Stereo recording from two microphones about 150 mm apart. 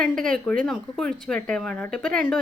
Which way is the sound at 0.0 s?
5° left (ahead or behind).